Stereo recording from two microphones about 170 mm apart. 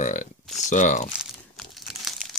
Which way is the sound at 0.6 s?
45° left (ahead or behind).